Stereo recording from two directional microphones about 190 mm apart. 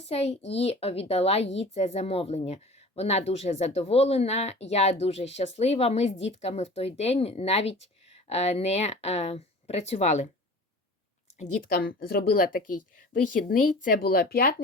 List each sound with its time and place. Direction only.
0.0 s speech: 35° left (ahead or behind)
11.3 s a woman's voice: 45° left (ahead or behind)